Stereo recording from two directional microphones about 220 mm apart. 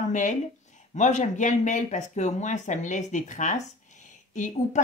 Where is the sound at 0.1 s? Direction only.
35° left (ahead or behind).